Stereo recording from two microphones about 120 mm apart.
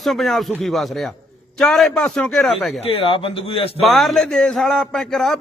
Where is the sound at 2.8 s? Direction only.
50° left (ahead or behind).